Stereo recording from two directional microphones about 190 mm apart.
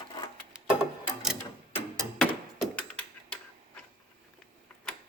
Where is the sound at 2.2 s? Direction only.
Centre (ahead or behind).